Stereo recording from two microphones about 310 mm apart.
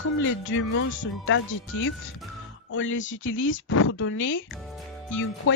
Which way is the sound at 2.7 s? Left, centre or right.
Left.